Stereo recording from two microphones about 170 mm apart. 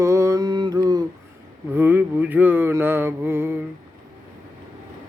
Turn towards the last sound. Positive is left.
turn(degrees=-15)  # may be behind; listen again after turning